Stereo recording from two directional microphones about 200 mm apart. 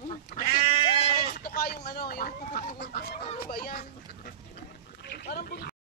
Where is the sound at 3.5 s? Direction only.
50° left (ahead or behind).